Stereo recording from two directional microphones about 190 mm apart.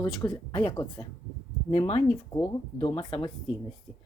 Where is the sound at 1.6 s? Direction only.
30° left (ahead or behind).